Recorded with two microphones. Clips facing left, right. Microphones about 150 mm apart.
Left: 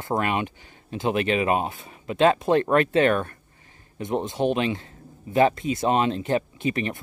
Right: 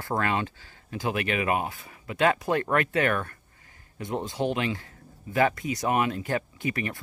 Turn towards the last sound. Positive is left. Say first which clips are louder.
# left 4 dB
turn(degrees=25)  # may be behind; listen again after turning